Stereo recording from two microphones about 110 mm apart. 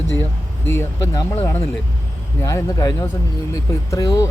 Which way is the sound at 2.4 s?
35° left (ahead or behind).